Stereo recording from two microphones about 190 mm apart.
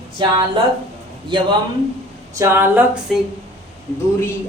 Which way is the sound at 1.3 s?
25° right (ahead or behind).